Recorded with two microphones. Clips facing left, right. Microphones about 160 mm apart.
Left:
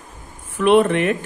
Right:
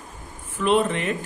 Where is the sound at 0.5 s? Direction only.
65° left (ahead or behind).